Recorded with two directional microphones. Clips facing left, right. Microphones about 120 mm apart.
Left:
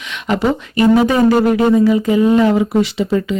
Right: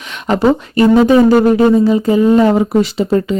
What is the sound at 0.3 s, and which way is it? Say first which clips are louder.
Speech: right 4 dB; 35° right (ahead or behind).